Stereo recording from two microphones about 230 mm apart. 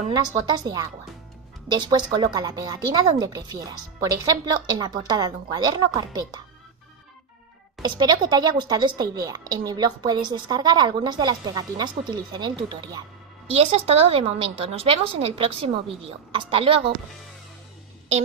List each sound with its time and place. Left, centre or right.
0.2 s a woman's voice: centre
7.8 s a woman's voice: centre